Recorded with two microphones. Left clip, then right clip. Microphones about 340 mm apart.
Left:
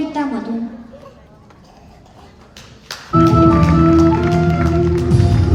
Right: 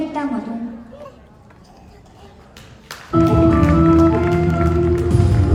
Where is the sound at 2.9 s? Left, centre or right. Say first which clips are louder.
Left 4 dB; left.